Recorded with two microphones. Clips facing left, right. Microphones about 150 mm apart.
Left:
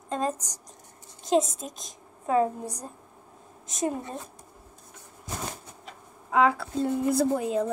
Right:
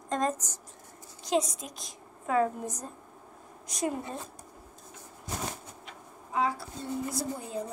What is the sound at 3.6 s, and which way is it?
Speech, 25° left (ahead or behind).